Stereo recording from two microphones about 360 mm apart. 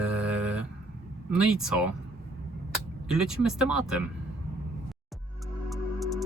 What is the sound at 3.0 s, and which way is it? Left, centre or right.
Speech, centre.